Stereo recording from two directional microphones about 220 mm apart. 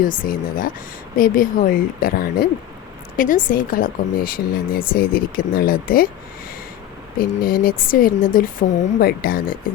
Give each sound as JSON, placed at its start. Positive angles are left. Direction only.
{"t": 0.3, "sound": "speech", "side_deg": 40}
{"t": 7.2, "sound": "speech", "side_deg": 40}